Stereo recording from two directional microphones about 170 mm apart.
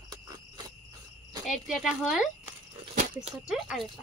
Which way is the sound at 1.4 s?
Centre (ahead or behind).